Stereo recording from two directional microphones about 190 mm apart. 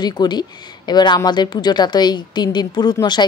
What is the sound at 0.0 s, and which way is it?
Speech, 20° left (ahead or behind).